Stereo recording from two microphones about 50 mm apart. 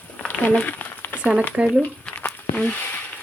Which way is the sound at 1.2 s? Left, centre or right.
Centre.